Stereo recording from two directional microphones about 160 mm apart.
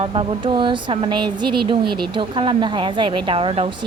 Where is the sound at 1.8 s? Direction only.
75° right (ahead or behind).